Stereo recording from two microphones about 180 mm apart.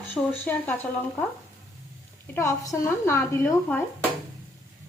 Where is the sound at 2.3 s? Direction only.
15° left (ahead or behind).